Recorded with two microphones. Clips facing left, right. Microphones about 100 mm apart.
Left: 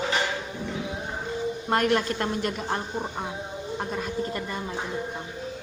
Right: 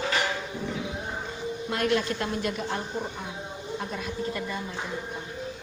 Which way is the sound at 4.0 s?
45° left (ahead or behind).